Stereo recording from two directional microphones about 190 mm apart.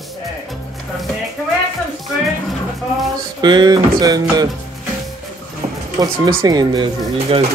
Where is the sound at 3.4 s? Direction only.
20° right (ahead or behind).